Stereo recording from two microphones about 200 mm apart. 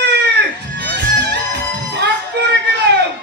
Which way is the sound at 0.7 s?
60° right (ahead or behind).